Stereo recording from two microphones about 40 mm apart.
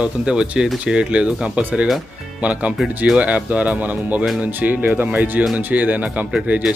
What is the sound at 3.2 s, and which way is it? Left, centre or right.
Speech, right.